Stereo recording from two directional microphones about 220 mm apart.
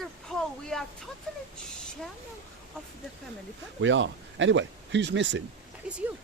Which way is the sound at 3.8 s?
55° right (ahead or behind).